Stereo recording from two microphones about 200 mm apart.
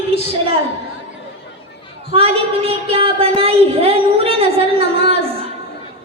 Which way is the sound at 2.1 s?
30° right (ahead or behind).